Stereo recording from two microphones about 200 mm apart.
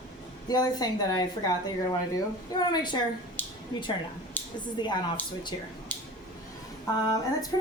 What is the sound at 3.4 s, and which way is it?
Speech, 10° left (ahead or behind).